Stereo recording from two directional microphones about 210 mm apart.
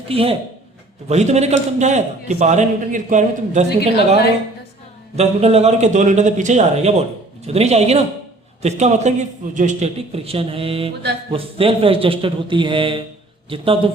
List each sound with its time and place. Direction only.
0.1 s a man's voice: 25° right (ahead or behind)
5.1 s a man's voice: 30° right (ahead or behind)